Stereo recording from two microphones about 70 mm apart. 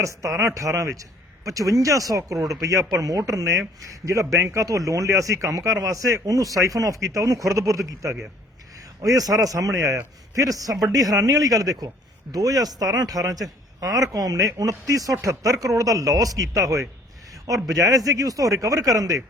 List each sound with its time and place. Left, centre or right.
0.0 s a man's voice: right